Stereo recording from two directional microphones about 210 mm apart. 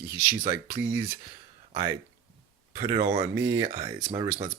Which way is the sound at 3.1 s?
15° right (ahead or behind).